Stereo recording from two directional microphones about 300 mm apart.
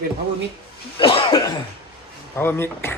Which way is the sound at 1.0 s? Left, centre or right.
Centre.